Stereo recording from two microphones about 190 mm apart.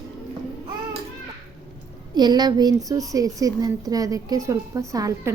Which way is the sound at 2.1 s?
20° right (ahead or behind).